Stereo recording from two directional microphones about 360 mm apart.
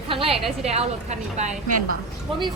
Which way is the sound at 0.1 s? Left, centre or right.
Centre.